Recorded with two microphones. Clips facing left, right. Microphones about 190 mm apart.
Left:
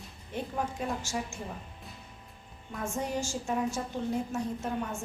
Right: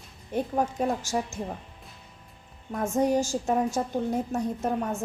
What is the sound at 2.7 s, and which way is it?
A woman's voice, 45° right (ahead or behind).